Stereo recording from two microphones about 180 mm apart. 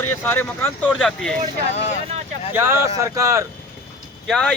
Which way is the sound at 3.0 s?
15° right (ahead or behind).